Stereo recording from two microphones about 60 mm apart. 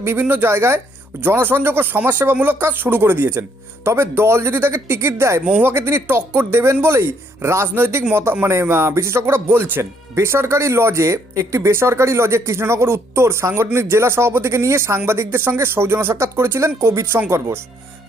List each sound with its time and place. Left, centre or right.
0.0 s speech: right
10.2 s speech: right